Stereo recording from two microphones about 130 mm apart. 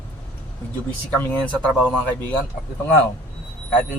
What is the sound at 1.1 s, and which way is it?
Speech, 10° left (ahead or behind).